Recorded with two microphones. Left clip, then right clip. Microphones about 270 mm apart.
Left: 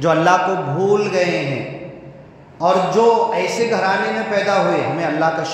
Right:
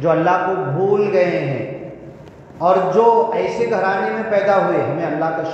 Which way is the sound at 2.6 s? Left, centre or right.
Left.